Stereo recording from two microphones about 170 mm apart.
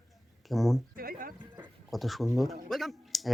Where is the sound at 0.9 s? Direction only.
60° right (ahead or behind).